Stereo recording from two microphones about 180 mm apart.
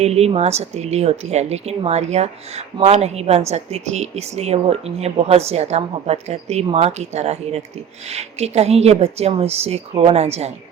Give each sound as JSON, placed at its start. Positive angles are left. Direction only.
{"t": 0.0, "sound": "speech", "side_deg": -35}